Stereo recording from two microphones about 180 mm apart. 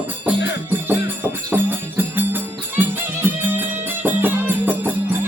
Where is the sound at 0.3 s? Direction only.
75° left (ahead or behind).